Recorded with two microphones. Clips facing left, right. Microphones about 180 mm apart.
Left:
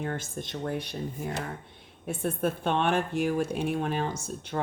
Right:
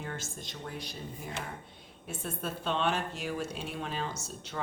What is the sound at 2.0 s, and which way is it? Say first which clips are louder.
Speech: left 9 dB; 55° left (ahead or behind).